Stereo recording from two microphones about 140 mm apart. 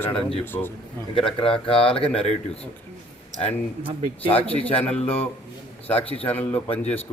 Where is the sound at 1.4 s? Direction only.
40° left (ahead or behind).